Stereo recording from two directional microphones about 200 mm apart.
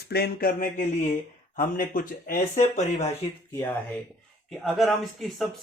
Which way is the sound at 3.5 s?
10° left (ahead or behind).